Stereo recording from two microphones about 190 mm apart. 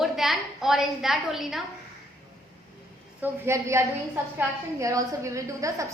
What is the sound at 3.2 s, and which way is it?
A woman's voice, 15° right (ahead or behind).